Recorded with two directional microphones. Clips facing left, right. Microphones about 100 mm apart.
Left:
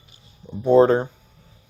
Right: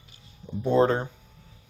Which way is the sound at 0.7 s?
40° left (ahead or behind).